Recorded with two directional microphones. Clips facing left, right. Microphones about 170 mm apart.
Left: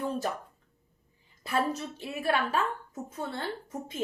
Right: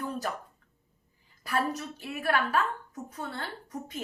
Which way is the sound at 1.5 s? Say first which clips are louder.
Left 1 dB; 25° left (ahead or behind).